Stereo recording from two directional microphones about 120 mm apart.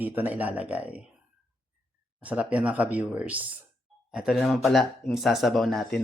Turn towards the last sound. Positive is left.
turn(degrees=0)  # may be behind; listen again after turning